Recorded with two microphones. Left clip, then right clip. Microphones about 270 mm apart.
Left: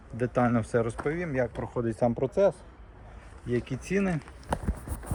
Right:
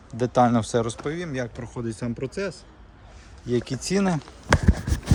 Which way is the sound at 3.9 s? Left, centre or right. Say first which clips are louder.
Right 4 dB; centre.